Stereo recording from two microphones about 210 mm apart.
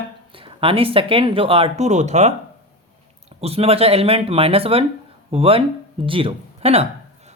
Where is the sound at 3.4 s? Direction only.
30° right (ahead or behind).